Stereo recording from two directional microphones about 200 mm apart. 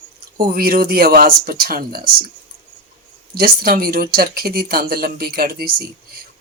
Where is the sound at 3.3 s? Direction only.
45° right (ahead or behind).